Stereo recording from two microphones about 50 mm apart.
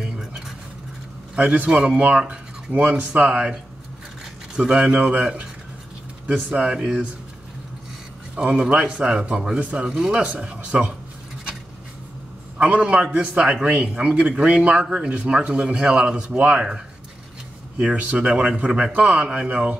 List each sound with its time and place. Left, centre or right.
0.0 s keys jangling: centre
1.3 s a man's voice: right
4.6 s a man's voice: centre
8.5 s a man's voice: centre
9.6 s speech: right
9.8 s a man's voice: centre
10.2 s speech: right
12.5 s a man's voice: right
12.8 s speech: centre